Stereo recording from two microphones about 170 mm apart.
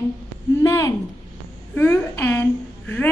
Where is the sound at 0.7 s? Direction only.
20° left (ahead or behind).